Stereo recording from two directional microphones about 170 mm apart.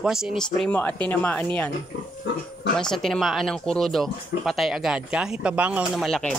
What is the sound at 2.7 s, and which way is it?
Speech, 5° left (ahead or behind).